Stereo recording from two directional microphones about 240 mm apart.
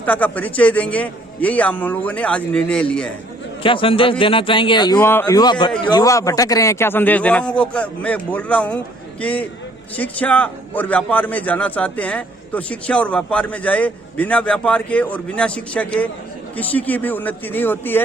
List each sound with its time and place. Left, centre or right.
0.0 s a man's voice: centre
3.6 s a man's voice: left